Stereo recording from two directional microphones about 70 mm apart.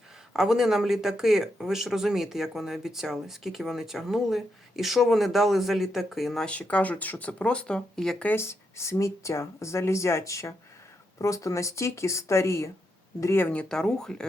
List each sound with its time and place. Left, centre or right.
0.3 s speech: centre
6.4 s speech: centre
8.4 s speech: left
13.4 s speech: centre
13.7 s speech: centre